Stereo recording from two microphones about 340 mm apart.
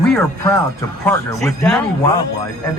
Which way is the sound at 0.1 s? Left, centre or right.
Centre.